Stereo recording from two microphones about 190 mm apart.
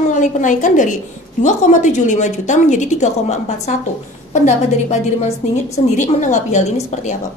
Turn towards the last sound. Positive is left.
turn(degrees=40)  # may be behind; listen again after turning